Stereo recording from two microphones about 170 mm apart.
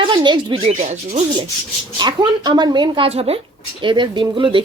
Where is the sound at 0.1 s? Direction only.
25° right (ahead or behind).